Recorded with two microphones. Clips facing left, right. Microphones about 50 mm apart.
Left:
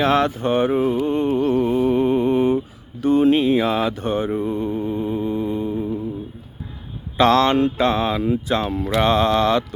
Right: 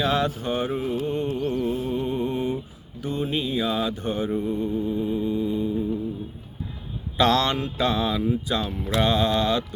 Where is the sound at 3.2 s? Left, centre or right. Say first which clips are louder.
Left 7 dB; left.